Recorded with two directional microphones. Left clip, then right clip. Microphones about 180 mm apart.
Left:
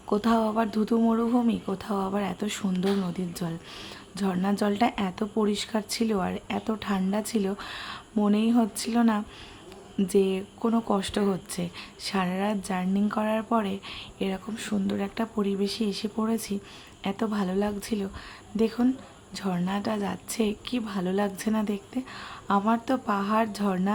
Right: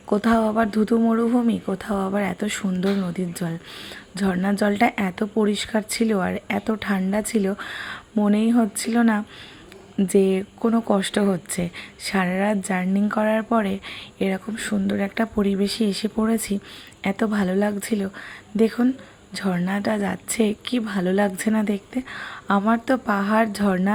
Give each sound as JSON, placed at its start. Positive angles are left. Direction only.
{"t": 0.1, "sound": "a woman's voice", "side_deg": -15}